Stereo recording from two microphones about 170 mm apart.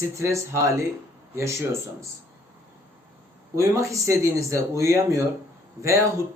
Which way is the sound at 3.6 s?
20° right (ahead or behind).